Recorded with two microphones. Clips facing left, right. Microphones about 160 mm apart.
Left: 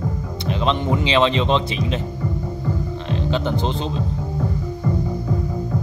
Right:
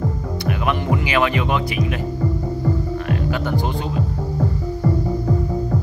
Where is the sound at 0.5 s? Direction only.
25° left (ahead or behind).